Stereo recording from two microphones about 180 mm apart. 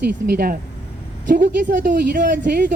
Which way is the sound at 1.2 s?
45° right (ahead or behind).